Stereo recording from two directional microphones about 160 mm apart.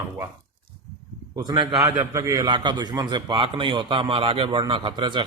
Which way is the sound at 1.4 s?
30° right (ahead or behind).